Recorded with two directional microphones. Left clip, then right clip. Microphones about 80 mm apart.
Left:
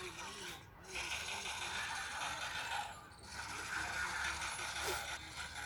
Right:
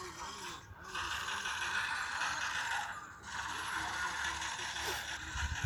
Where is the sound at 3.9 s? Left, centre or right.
Right.